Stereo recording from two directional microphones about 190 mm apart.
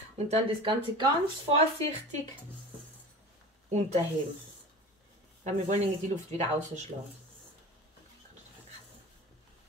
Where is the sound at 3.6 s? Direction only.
35° right (ahead or behind).